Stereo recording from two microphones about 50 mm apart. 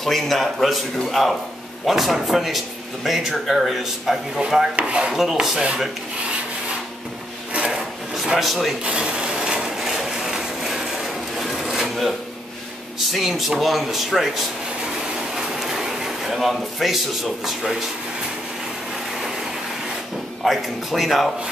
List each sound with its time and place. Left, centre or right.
0.0 s speech: centre
4.4 s rub: centre
4.7 s rub: right
5.1 s rub: centre
7.5 s a sound: right
8.4 s speech: centre
8.8 s a sound: centre
11.3 s wood: centre
13.0 s speech: centre
15.3 s a sound: centre
20.4 s speech: centre